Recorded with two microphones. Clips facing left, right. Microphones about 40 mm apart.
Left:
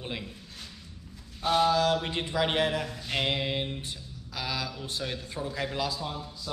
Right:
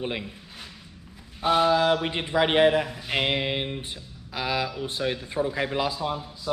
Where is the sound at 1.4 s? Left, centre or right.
Right.